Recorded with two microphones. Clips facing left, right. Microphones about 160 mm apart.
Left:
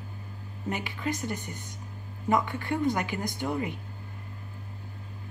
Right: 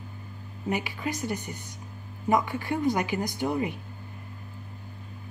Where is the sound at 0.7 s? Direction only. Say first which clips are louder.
Right 2 dB; 20° right (ahead or behind).